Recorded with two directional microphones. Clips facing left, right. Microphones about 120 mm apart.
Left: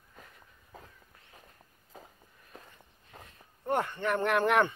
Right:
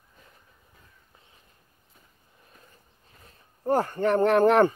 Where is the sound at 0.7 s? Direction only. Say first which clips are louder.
Left 12 dB; 90° left.